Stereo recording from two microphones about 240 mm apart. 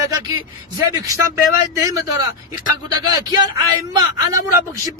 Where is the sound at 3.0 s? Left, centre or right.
Centre.